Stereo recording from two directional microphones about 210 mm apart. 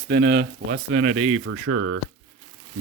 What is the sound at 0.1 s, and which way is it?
Speech, 55° right (ahead or behind).